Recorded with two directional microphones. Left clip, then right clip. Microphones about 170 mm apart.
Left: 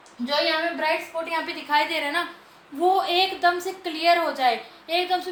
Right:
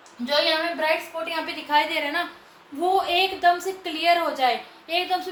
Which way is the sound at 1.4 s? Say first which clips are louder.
Right 2 dB; 20° left (ahead or behind).